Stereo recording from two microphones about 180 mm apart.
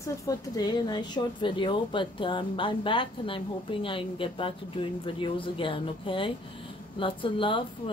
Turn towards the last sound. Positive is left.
turn(degrees=30)  # may be behind; listen again after turning